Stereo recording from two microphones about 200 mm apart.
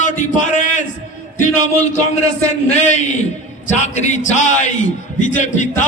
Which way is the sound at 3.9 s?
35° left (ahead or behind).